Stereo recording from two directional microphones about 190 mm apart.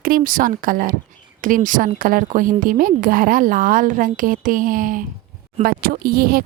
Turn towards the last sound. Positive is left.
turn(degrees=-50)  # may be behind; listen again after turning